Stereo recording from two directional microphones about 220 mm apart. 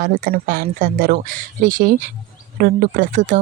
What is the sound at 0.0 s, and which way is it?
Speech, 40° right (ahead or behind).